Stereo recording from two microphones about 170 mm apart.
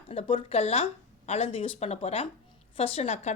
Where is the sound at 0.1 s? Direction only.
35° left (ahead or behind).